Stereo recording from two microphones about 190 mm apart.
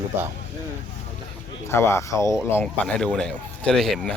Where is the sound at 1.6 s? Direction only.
15° left (ahead or behind).